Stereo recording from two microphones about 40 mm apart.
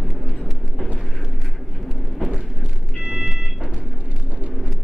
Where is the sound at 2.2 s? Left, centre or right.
Centre.